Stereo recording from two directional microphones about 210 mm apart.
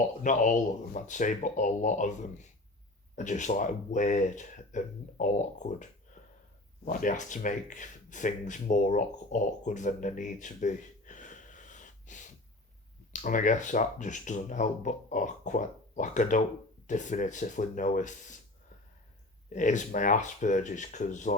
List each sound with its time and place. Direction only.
0.2 s speech: 40° left (ahead or behind)
6.2 s a sound: 35° left (ahead or behind)
6.8 s speech: 40° left (ahead or behind)
19.5 s speech: 35° left (ahead or behind)